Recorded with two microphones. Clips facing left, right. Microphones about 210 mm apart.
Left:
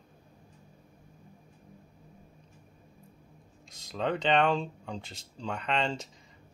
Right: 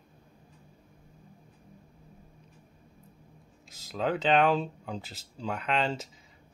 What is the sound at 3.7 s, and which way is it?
Speech, 5° right (ahead or behind).